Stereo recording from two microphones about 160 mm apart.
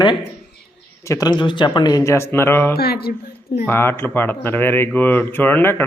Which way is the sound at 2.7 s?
75° left (ahead or behind).